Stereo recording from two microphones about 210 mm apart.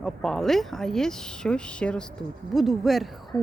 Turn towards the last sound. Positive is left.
turn(degrees=0)  # may be behind; listen again after turning